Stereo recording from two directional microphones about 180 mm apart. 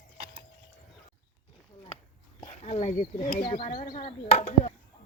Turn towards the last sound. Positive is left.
turn(degrees=35)  # may be behind; listen again after turning